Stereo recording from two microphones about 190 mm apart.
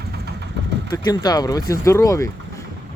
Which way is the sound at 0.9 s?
20° left (ahead or behind).